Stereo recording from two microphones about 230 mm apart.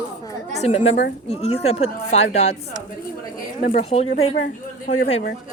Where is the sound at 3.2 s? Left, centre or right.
Left.